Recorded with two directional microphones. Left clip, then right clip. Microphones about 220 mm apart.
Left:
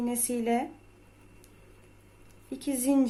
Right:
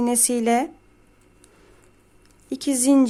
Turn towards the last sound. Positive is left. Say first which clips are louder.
# right 8 dB
turn(degrees=-35)  # may be behind; listen again after turning